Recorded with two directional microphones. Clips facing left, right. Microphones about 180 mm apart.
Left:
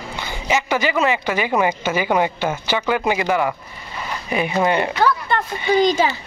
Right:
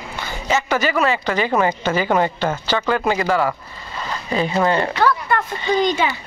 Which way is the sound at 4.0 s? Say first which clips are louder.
Right 1 dB; 15° left (ahead or behind).